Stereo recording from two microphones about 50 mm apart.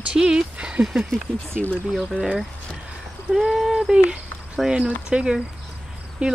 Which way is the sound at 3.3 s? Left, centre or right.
Centre.